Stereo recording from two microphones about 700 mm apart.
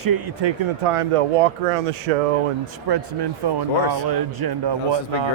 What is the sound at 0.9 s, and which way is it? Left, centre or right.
Speech, right.